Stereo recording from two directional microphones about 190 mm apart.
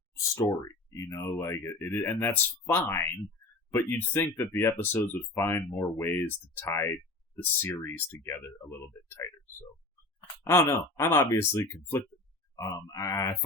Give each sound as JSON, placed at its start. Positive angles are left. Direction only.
{"t": 0.2, "sound": "speech", "side_deg": 15}